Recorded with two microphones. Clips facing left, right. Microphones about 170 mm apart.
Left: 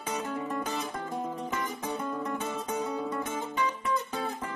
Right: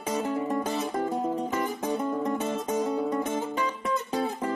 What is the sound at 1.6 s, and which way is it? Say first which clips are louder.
Music: right 5 dB; 20° right (ahead or behind).